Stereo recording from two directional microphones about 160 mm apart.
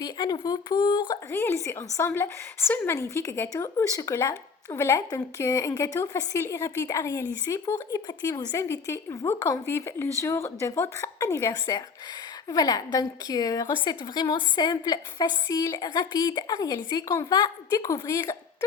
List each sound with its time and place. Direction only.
0.0 s a woman's voice: 25° left (ahead or behind)
1.3 s a woman's voice: 15° left (ahead or behind)